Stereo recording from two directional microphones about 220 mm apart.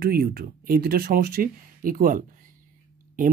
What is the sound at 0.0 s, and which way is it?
Speech, 45° right (ahead or behind).